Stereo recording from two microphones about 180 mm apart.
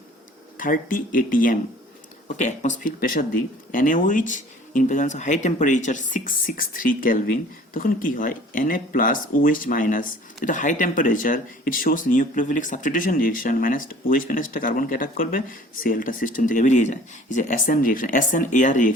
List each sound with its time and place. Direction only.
0.5 s speech: 50° left (ahead or behind)